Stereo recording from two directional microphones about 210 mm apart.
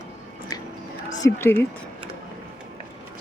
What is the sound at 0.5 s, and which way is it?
Music, 20° left (ahead or behind).